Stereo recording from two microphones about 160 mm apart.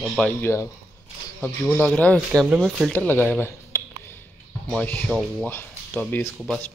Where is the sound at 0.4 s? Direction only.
20° left (ahead or behind).